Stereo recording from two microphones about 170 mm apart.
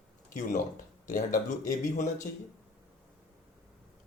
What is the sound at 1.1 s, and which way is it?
Speech, 45° left (ahead or behind).